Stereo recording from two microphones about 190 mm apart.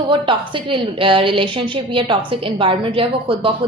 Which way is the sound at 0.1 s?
25° right (ahead or behind).